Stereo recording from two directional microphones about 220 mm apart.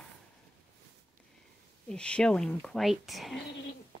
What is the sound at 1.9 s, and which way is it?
Speech, 5° left (ahead or behind).